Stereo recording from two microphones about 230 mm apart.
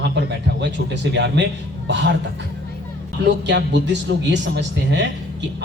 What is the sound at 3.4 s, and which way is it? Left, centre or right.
A man's voice, right.